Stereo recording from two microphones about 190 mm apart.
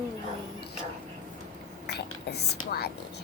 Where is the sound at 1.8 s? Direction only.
60° left (ahead or behind).